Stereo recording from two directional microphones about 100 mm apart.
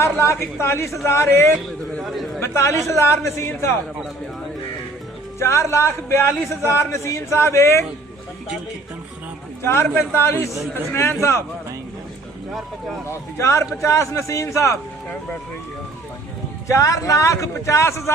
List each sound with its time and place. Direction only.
0.0 s a man's voice: 25° left (ahead or behind)
2.0 s a man's voice: centre (ahead or behind)
2.4 s a man's voice: 25° left (ahead or behind)
5.4 s a man's voice: 25° left (ahead or behind)
10.1 s a man's voice: 25° left (ahead or behind)
13.1 s a man's voice: 30° left (ahead or behind)
16.6 s speech: 35° left (ahead or behind)